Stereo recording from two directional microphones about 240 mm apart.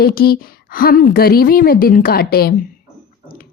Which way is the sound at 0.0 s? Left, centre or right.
Left.